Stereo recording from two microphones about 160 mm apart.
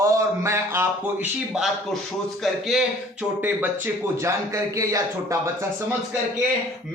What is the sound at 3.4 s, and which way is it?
A man's voice, 15° right (ahead or behind).